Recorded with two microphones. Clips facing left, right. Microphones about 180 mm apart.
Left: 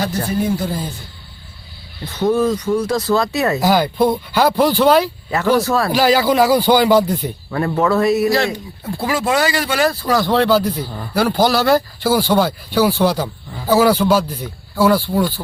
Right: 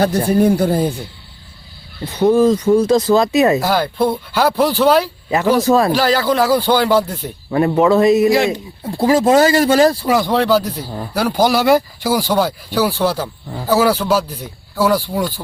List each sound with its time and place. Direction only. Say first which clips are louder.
0.3 s speech: right 7 dB; 60° right (ahead or behind)
2.1 s speech: right 4 dB; 15° right (ahead or behind)
3.6 s speech: left 2 dB; centre (ahead or behind)
5.3 s speech: right 3 dB; 15° right (ahead or behind)
5.9 s speech: left 1 dB; centre (ahead or behind)
7.5 s speech: right 4 dB; 20° right (ahead or behind)
8.8 s speech: right 7 dB; 35° right (ahead or behind)
10.2 s speech: even; 5° right (ahead or behind)